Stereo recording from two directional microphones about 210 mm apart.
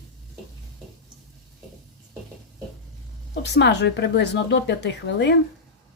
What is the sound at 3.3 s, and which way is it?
Speech, 55° left (ahead or behind).